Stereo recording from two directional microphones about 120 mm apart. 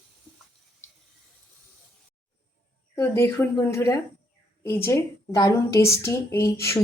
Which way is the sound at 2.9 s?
20° left (ahead or behind).